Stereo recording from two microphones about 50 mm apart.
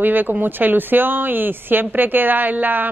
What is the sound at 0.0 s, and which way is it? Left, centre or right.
Speech, right.